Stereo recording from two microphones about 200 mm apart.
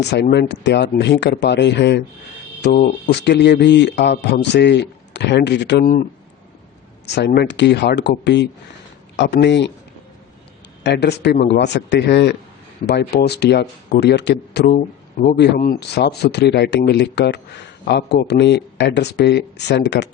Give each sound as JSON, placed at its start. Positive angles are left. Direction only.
{"t": 0.0, "sound": "speech", "side_deg": 60}
{"t": 7.2, "sound": "speech", "side_deg": 55}
{"t": 10.8, "sound": "speech", "side_deg": 55}